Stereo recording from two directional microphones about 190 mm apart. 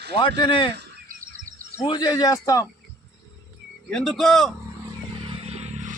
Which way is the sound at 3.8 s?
5° left (ahead or behind).